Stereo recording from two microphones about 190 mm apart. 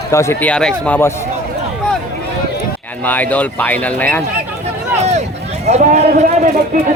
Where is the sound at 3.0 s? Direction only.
10° left (ahead or behind).